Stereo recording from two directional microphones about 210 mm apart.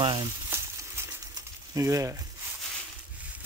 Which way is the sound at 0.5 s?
10° right (ahead or behind).